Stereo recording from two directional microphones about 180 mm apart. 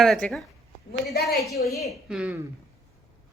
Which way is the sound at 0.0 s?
Centre (ahead or behind).